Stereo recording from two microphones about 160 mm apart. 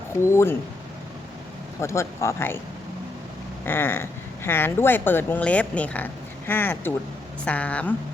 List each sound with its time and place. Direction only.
0.2 s speech: 15° left (ahead or behind)
1.8 s speech: 15° left (ahead or behind)
3.7 s speech: 15° left (ahead or behind)